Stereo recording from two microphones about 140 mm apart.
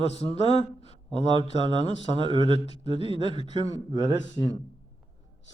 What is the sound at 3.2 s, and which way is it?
Speech, 50° left (ahead or behind).